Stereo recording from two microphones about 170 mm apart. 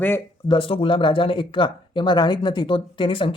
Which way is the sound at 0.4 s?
30° left (ahead or behind).